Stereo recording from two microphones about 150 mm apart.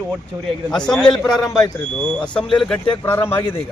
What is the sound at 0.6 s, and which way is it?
Speech, 5° left (ahead or behind).